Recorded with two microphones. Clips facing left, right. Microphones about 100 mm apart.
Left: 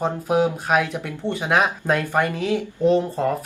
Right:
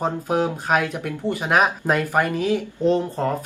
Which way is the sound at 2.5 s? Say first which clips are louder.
Left 5 dB; 10° left (ahead or behind).